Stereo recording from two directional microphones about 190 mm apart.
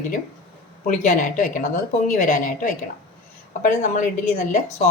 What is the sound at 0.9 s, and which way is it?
A woman's voice, 40° left (ahead or behind).